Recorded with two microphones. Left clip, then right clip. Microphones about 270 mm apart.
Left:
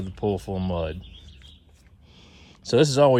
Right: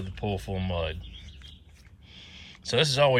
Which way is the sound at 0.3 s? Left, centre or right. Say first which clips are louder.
Left 6 dB; left.